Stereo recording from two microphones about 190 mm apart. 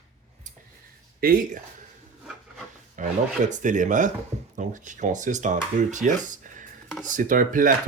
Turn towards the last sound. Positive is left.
turn(degrees=-45)  # may be behind; listen again after turning